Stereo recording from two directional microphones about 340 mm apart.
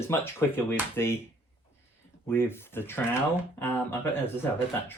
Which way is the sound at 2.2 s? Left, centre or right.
Centre.